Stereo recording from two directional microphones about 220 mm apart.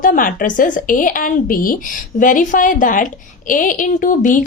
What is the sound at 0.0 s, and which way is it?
A woman's voice, 40° left (ahead or behind).